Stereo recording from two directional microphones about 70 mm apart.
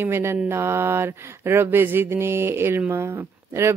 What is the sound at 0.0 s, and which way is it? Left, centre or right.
Mantra, right.